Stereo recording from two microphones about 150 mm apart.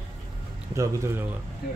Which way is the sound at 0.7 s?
20° right (ahead or behind).